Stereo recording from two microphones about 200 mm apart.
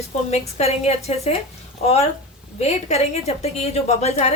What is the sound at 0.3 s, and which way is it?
A woman's voice, 30° left (ahead or behind).